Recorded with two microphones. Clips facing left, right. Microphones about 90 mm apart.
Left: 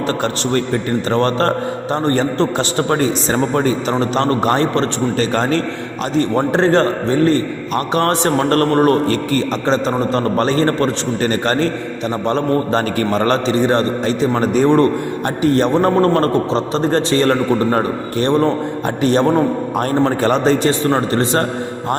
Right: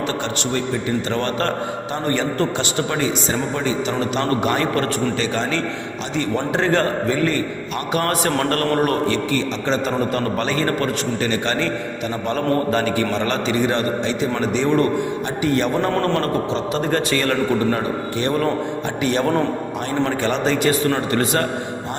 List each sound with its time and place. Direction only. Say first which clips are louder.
0.1 s a man's voice: left 5 dB; 45° left (ahead or behind)
3.9 s a man's voice: left 4 dB; 35° left (ahead or behind)
5.2 s a man's voice: left 5 dB; 45° left (ahead or behind)